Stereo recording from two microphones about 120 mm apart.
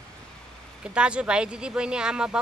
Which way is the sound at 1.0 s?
10° right (ahead or behind).